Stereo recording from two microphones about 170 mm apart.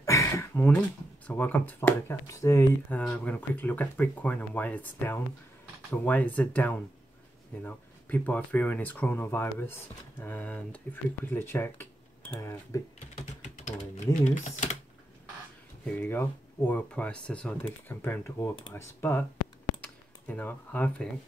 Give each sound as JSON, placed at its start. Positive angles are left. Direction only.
{"t": 0.0, "sound": "a sound", "side_deg": 15}
{"t": 1.2, "sound": "speech", "side_deg": 10}
{"t": 13.1, "sound": "typing", "side_deg": 45}
{"t": 14.2, "sound": "speech", "side_deg": 45}
{"t": 15.8, "sound": "speech", "side_deg": 10}